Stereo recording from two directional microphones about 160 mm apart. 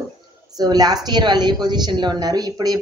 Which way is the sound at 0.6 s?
25° right (ahead or behind).